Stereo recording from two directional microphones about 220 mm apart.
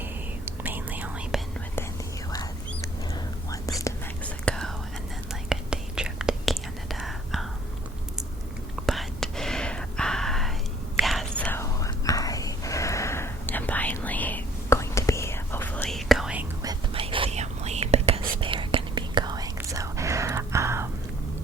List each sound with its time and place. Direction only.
0.0 s whispering: 10° right (ahead or behind)
2.3 s whispering: 15° left (ahead or behind)
4.4 s whispering: 5° left (ahead or behind)
8.9 s whispering: centre (ahead or behind)
16.6 s whispering: 25° right (ahead or behind)